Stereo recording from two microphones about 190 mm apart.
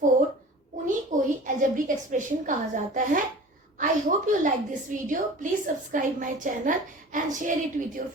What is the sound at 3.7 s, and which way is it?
A woman's voice, 45° right (ahead or behind).